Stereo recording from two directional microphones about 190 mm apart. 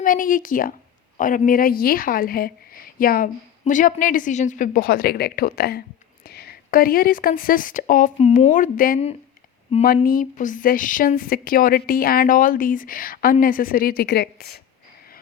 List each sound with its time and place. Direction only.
0.0 s a woman's voice: 45° left (ahead or behind)